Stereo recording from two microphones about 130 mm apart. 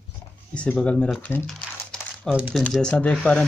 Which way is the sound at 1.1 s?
10° left (ahead or behind).